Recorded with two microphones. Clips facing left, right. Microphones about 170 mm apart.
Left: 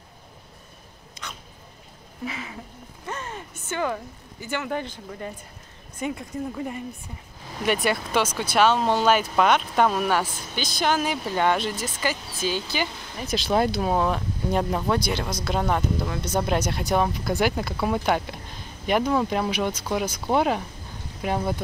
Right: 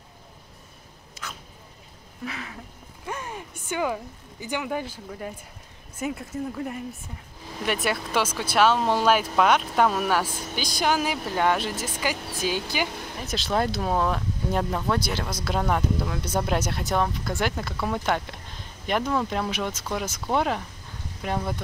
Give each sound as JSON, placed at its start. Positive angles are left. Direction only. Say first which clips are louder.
{"t": 1.2, "sound": "a sound", "louder": "even", "side_deg": -5}
{"t": 2.2, "sound": "speech", "louder": "left 2 dB", "side_deg": 0}
{"t": 3.1, "sound": "speech", "louder": "even", "side_deg": -10}
{"t": 13.5, "sound": "speech", "louder": "left 2 dB", "side_deg": 5}
{"t": 15.0, "sound": "speech", "louder": "left 2 dB", "side_deg": -5}